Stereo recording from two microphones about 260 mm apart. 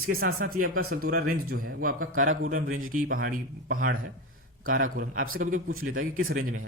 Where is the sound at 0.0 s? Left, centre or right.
Right.